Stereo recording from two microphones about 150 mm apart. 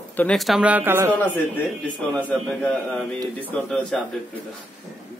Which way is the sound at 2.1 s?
10° left (ahead or behind).